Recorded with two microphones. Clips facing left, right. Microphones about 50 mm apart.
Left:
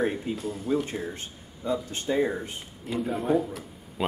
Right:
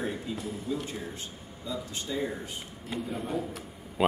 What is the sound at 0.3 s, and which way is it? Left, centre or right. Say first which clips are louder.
Speech: left 5 dB; left.